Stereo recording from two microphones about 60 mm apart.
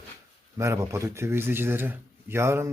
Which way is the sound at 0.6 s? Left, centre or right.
Right.